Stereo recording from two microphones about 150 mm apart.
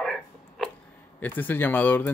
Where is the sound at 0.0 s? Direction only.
5° left (ahead or behind).